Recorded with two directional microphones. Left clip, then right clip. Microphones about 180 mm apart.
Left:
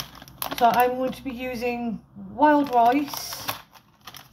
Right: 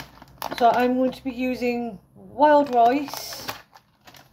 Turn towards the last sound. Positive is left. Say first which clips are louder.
# left 1 dB
turn(degrees=-40)  # may be behind; listen again after turning